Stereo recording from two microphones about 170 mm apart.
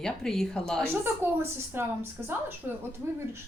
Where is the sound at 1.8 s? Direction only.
15° right (ahead or behind).